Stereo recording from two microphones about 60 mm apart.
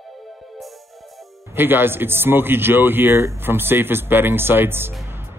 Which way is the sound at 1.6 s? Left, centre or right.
Right.